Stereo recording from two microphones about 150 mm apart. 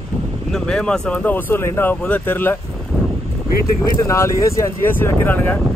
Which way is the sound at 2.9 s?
Centre (ahead or behind).